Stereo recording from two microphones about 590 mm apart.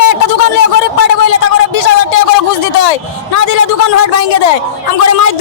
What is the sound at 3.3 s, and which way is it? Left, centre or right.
A man's voice, left.